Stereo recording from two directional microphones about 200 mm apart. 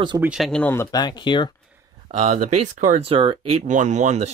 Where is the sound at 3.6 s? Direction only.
35° right (ahead or behind).